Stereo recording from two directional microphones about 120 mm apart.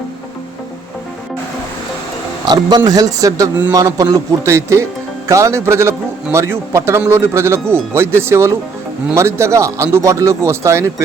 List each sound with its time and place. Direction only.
2.5 s a man's voice: 35° right (ahead or behind)